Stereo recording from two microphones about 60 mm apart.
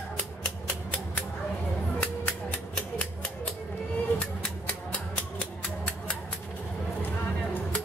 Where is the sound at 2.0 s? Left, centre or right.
Left.